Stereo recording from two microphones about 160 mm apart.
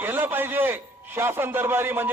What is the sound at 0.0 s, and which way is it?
A man's voice, 15° right (ahead or behind).